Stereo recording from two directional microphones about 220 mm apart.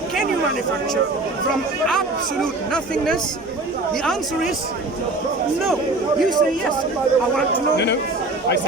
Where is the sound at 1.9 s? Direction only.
Centre (ahead or behind).